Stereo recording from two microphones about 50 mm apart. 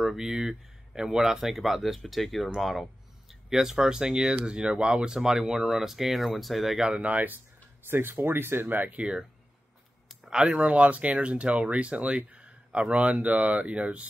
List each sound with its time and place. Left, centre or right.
0.0 s speech: centre
2.6 s a sound: centre
3.4 s speech: centre
6.8 s speech: right
7.9 s speech: right
10.3 s speech: centre